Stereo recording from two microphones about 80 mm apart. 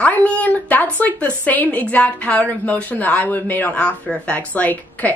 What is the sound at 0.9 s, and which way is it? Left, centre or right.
A woman's voice, centre.